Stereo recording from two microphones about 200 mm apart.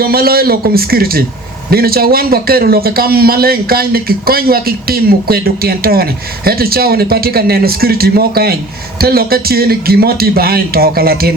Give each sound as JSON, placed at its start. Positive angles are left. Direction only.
{"t": 0.0, "sound": "a man's voice", "side_deg": -50}